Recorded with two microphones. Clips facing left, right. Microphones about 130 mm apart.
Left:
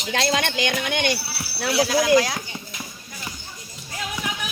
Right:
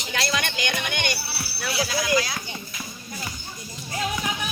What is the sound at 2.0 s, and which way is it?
Speech, 75° left (ahead or behind).